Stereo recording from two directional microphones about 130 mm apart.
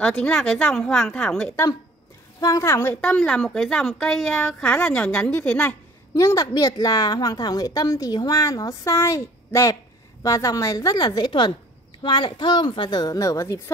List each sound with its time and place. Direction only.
0.0 s a woman's voice: 10° left (ahead or behind)
2.4 s a woman's voice: 25° left (ahead or behind); by 5.8 s 10° left (ahead or behind)
6.1 s a woman's voice: 25° left (ahead or behind)